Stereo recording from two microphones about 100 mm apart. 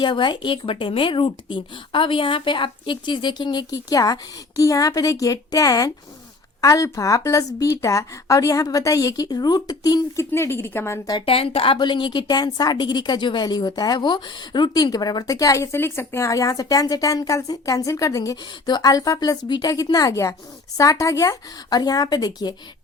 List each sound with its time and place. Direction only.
0.0 s a woman's voice: 50° left (ahead or behind)
10.3 s a woman's voice: 25° left (ahead or behind)
11.3 s a woman's voice: 65° left (ahead or behind)
11.8 s a woman's voice: 50° left (ahead or behind)